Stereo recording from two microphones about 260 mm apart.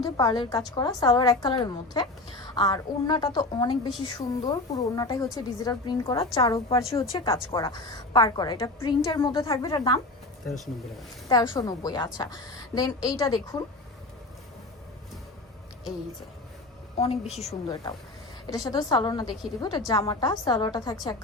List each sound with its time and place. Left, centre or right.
0.0 s a woman's voice: centre
11.3 s a woman's voice: centre
17.0 s a woman's voice: left
17.5 s a woman's voice: centre